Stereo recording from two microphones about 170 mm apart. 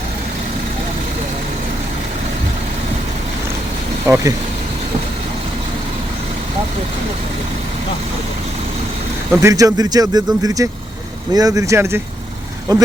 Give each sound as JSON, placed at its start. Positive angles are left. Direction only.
{"t": 4.0, "sound": "speech", "side_deg": -15}
{"t": 9.4, "sound": "speech", "side_deg": -20}